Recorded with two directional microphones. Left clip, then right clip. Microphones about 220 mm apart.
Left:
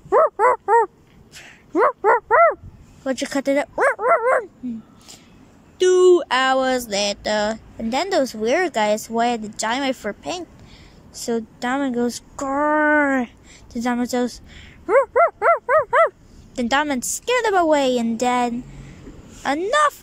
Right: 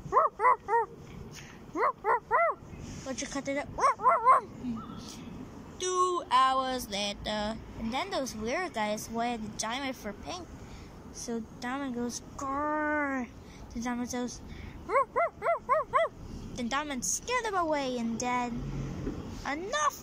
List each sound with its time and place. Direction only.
0.1 s dog: 50° left (ahead or behind)
1.3 s a sound: 50° left (ahead or behind)
3.1 s bow-wow: 45° left (ahead or behind)
5.8 s speech: 45° left (ahead or behind)
12.4 s a sound: 50° left (ahead or behind)
13.8 s speech: 50° left (ahead or behind)
14.9 s dog: 45° left (ahead or behind)
16.5 s speech: 45° left (ahead or behind)